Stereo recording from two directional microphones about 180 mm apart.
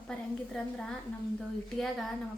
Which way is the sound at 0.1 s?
5° left (ahead or behind).